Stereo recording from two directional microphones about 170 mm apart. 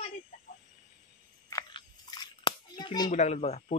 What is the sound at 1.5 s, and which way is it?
Biting, 25° left (ahead or behind).